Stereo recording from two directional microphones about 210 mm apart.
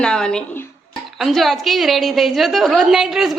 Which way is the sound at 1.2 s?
Centre (ahead or behind).